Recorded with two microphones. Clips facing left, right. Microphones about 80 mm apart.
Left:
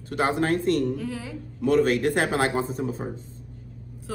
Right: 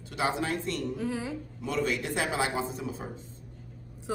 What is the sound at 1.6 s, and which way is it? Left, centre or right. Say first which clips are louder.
Speech: left 10 dB; left.